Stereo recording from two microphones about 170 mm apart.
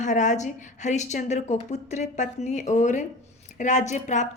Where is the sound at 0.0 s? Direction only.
45° left (ahead or behind).